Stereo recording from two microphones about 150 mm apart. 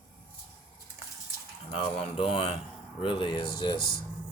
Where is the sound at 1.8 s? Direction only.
40° left (ahead or behind).